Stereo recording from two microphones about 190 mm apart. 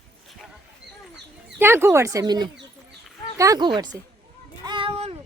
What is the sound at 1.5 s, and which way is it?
Speech, 10° right (ahead or behind).